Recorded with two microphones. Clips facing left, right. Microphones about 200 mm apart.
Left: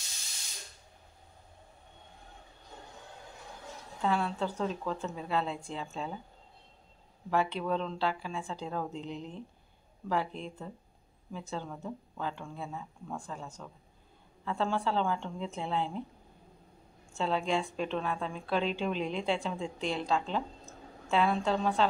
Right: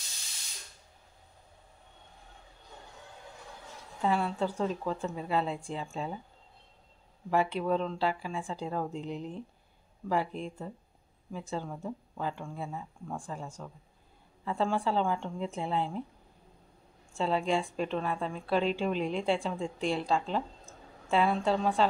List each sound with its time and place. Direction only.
4.0 s a woman's voice: 5° right (ahead or behind)
7.2 s a woman's voice: 5° right (ahead or behind)
17.2 s a woman's voice: 5° right (ahead or behind)